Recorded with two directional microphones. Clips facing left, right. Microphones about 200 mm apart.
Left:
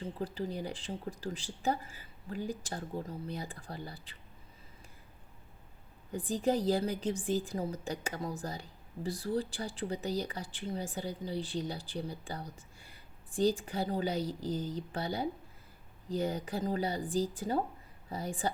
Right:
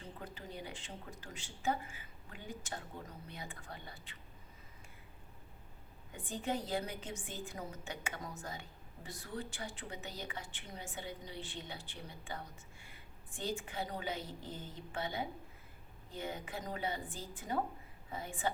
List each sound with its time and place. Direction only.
0.0 s speech: 30° left (ahead or behind)
6.1 s speech: 35° left (ahead or behind)